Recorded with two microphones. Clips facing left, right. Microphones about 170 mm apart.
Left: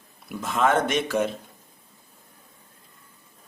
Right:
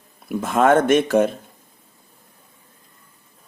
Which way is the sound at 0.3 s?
50° right (ahead or behind).